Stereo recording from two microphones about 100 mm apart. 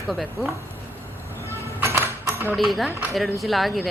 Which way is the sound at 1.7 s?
25° right (ahead or behind).